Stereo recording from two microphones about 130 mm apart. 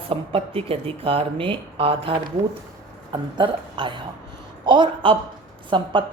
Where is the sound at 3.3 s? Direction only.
40° right (ahead or behind).